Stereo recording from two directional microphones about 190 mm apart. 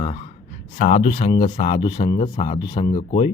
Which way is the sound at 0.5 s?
40° left (ahead or behind).